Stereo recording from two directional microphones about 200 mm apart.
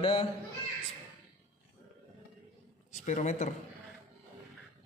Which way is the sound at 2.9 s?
35° left (ahead or behind).